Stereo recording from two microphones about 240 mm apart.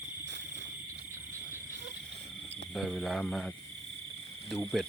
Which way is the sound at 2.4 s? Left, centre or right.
Right.